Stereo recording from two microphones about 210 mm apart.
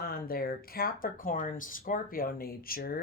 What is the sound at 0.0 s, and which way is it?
Speech, 45° left (ahead or behind).